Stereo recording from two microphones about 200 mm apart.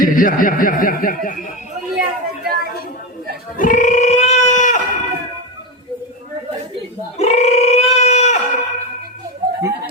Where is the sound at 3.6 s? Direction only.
40° left (ahead or behind).